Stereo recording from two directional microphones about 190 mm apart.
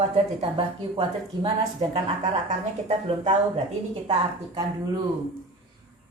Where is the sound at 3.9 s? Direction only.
25° right (ahead or behind).